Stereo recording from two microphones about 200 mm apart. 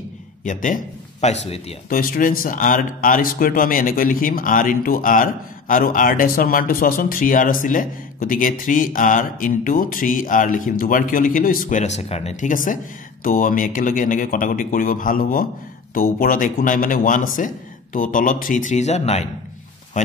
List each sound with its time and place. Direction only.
0.4 s a man's voice: 40° left (ahead or behind)
1.9 s speech: 45° left (ahead or behind)